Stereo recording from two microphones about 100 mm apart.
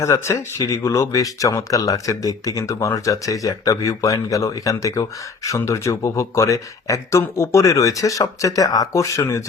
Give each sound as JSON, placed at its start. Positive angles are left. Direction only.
{"t": 0.0, "sound": "speech", "side_deg": 30}